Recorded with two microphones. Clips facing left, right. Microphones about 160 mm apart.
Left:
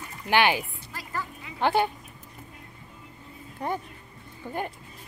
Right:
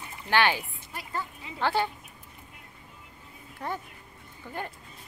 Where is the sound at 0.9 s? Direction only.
20° right (ahead or behind).